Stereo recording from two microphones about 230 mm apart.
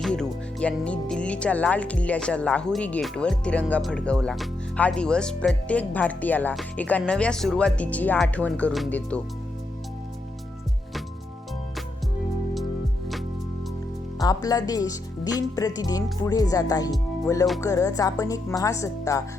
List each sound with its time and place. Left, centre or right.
0.0 s speech: centre
14.2 s speech: centre